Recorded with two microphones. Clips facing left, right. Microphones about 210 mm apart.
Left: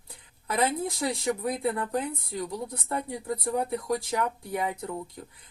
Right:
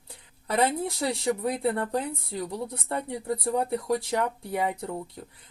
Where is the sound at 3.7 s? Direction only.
30° right (ahead or behind).